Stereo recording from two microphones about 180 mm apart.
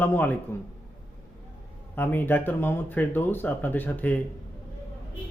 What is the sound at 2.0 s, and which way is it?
A man's voice, 10° left (ahead or behind).